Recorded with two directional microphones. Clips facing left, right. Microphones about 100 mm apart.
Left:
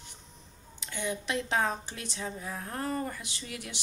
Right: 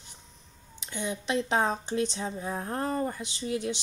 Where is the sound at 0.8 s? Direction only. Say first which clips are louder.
Right 1 dB; 20° right (ahead or behind).